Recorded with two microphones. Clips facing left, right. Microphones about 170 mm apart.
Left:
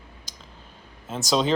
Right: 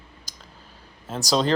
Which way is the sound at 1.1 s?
Centre (ahead or behind).